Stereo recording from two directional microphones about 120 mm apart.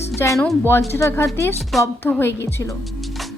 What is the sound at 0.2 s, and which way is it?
Speech, 25° left (ahead or behind).